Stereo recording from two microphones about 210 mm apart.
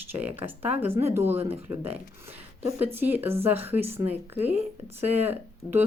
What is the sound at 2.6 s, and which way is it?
Speech, 10° right (ahead or behind).